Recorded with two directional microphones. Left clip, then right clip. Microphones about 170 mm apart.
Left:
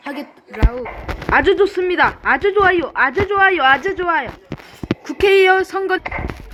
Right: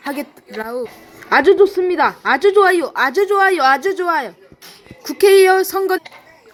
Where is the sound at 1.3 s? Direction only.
30° right (ahead or behind).